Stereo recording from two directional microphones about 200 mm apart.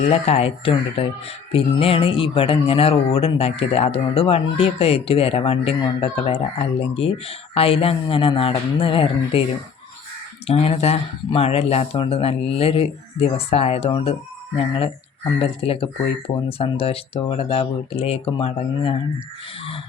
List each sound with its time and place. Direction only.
0.1 s speech: 30° left (ahead or behind)
10.4 s speech: 30° left (ahead or behind)